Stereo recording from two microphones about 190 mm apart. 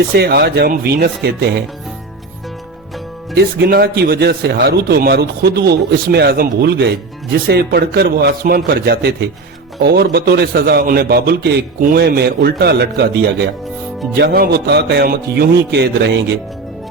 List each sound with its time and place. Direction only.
0.1 s a man's voice: 55° right (ahead or behind)
3.3 s a man's voice: 55° right (ahead or behind)